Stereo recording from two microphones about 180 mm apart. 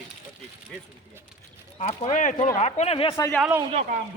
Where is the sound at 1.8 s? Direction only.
45° left (ahead or behind).